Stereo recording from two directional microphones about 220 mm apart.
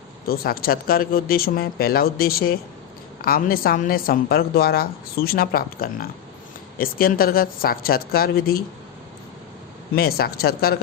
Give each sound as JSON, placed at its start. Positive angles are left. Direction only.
{"t": 0.3, "sound": "a woman's voice", "side_deg": 40}
{"t": 9.9, "sound": "a woman's voice", "side_deg": 45}